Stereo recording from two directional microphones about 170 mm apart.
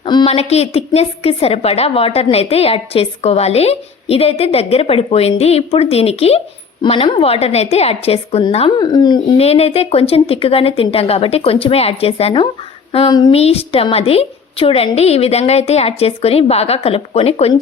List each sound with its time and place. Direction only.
0.0 s a sound: 30° left (ahead or behind)
0.3 s a woman's voice: 40° left (ahead or behind)
9.4 s a woman's voice: 35° left (ahead or behind)
13.4 s a woman's voice: 35° left (ahead or behind)